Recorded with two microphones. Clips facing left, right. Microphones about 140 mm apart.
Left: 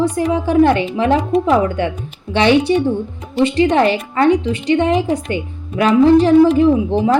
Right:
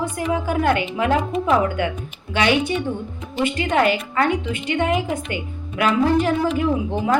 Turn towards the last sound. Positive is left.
turn(degrees=35)  # may be behind; listen again after turning